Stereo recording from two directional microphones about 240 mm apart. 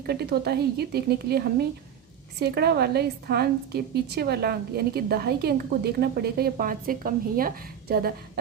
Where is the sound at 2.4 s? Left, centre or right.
Right.